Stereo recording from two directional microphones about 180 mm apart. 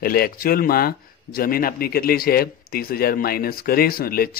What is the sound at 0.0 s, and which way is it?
Speech, 55° left (ahead or behind).